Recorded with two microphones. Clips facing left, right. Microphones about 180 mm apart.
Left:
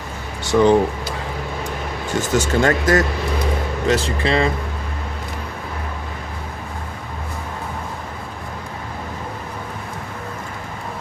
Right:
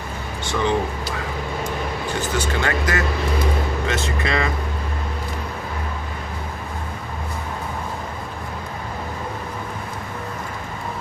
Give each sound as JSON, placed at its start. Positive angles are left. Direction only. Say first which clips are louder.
{"t": 0.5, "sound": "speech", "louder": "left 9 dB", "side_deg": 35}
{"t": 2.1, "sound": "speech", "louder": "left 7 dB", "side_deg": 45}